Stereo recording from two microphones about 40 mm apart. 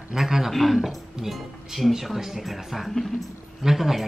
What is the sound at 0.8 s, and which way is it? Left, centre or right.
Speech, centre.